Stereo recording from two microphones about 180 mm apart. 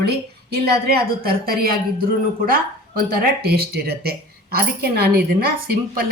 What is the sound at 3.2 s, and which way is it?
A woman's voice, 60° right (ahead or behind).